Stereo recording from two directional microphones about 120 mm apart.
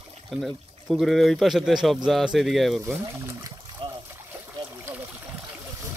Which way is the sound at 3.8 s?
50° right (ahead or behind).